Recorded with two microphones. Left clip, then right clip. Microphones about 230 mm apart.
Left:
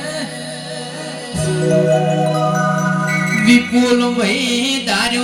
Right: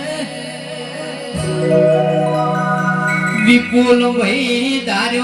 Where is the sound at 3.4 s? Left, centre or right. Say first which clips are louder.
Right 1 dB; left.